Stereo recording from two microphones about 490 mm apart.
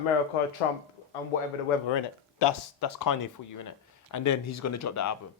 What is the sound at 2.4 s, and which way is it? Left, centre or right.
Speech, left.